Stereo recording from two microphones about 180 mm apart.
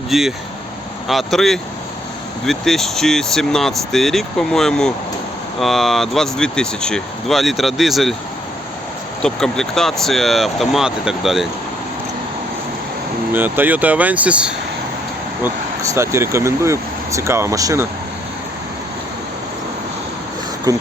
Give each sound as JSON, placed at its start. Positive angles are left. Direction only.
{"t": 0.1, "sound": "speech", "side_deg": 0}
{"t": 9.2, "sound": "speech", "side_deg": 5}
{"t": 13.3, "sound": "speech", "side_deg": -10}
{"t": 15.8, "sound": "speech", "side_deg": -15}
{"t": 20.7, "sound": "speech", "side_deg": -20}